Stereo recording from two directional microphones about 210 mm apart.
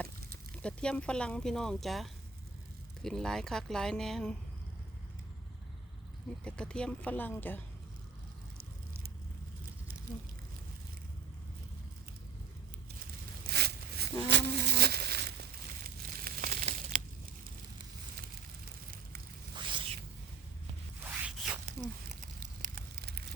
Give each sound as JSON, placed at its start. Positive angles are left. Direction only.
{"t": 0.5, "sound": "speech", "side_deg": 5}
{"t": 6.4, "sound": "speech", "side_deg": 5}
{"t": 13.5, "sound": "a sound", "side_deg": -50}
{"t": 14.3, "sound": "insect", "side_deg": -55}
{"t": 16.0, "sound": "crumpling", "side_deg": -40}
{"t": 19.5, "sound": "zipper", "side_deg": -25}
{"t": 21.0, "sound": "zipper", "side_deg": -5}
{"t": 22.1, "sound": "a sound", "side_deg": -40}